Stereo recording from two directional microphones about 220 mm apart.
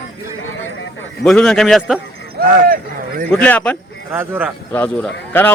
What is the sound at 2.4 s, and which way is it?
Speech, 40° right (ahead or behind).